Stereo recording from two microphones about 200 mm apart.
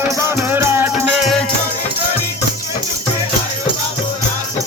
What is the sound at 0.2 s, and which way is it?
Music, 15° right (ahead or behind).